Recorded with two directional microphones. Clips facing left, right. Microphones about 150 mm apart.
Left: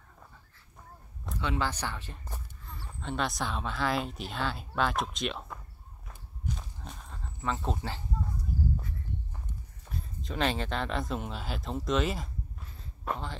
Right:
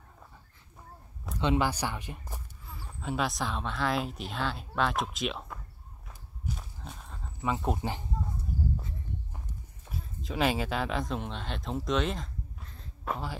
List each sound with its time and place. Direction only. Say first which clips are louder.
1.4 s speech: right 4 dB; 15° right (ahead or behind); by 5.6 s centre (ahead or behind)
6.0 s walk: left 1 dB; 5° right (ahead or behind)
7.5 s speech: right 3 dB; 15° right (ahead or behind)
9.8 s speech: even; 5° right (ahead or behind)